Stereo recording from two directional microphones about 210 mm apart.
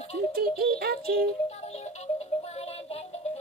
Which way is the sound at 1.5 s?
30° left (ahead or behind).